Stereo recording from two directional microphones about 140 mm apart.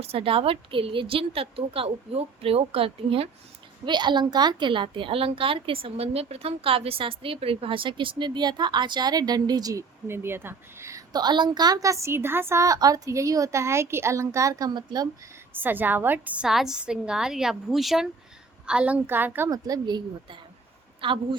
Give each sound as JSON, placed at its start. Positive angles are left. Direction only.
{"t": 0.0, "sound": "a woman's voice", "side_deg": -40}
{"t": 15.5, "sound": "a woman's voice", "side_deg": -15}
{"t": 19.5, "sound": "a woman's voice", "side_deg": -25}